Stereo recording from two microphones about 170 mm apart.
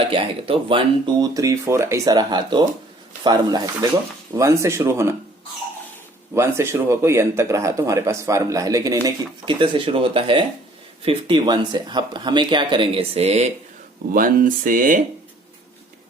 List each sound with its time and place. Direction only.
0.1 s speech: 30° right (ahead or behind); by 5.1 s 15° right (ahead or behind)
6.3 s speech: 15° right (ahead or behind); by 13.5 s 35° right (ahead or behind)
14.1 s speech: 55° right (ahead or behind)